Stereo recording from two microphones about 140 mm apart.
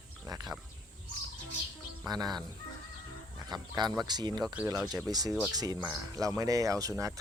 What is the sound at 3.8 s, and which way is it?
Speech, 30° right (ahead or behind).